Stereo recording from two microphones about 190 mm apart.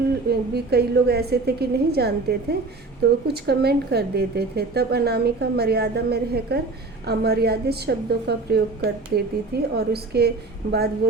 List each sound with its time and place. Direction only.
0.3 s speech: 55° right (ahead or behind)